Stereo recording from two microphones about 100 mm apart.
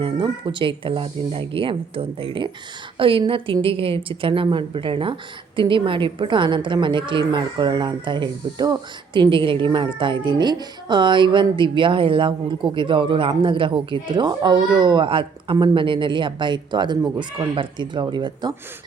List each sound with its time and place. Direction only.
0.0 s a woman's voice: 55° right (ahead or behind)